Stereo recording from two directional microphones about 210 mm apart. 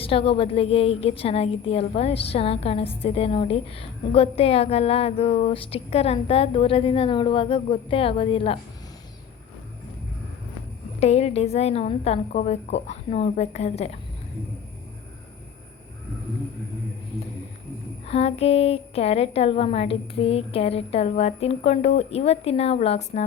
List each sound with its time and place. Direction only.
0.0 s a woman's voice: 25° left (ahead or behind)
11.0 s a woman's voice: 30° left (ahead or behind)
18.0 s a woman's voice: 30° left (ahead or behind)